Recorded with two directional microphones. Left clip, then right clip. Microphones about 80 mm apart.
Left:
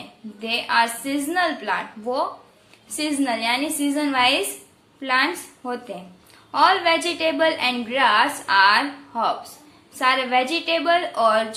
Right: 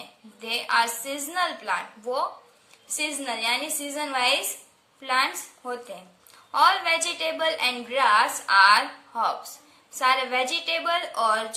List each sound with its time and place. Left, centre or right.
0.4 s a woman's voice: right